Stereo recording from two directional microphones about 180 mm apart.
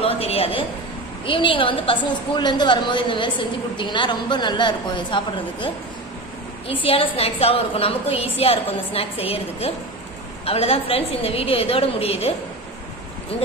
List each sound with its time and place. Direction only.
0.0 s a sound: 35° left (ahead or behind)
1.2 s a woman's voice: 30° left (ahead or behind)
6.7 s a woman's voice: 30° left (ahead or behind)